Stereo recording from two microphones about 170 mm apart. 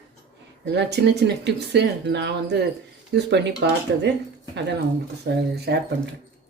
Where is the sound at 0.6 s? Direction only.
85° right.